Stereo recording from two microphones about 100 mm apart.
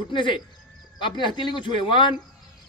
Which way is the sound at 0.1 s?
55° left (ahead or behind).